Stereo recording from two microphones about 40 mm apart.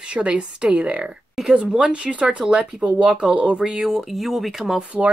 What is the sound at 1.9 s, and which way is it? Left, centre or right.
Speech, right.